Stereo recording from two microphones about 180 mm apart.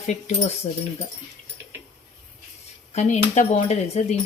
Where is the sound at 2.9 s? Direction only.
40° left (ahead or behind).